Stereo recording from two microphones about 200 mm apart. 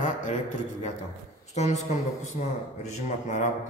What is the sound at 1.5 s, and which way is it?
Speech, 35° left (ahead or behind).